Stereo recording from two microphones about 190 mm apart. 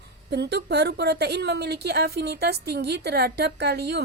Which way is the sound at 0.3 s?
60° right (ahead or behind).